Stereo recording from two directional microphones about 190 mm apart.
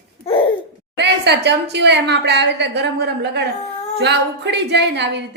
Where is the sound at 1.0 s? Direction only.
65° right (ahead or behind).